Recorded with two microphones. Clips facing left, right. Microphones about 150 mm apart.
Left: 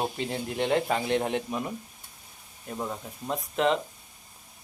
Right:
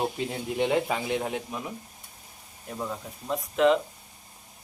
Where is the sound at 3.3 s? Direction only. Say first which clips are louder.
Right 4 dB; centre (ahead or behind).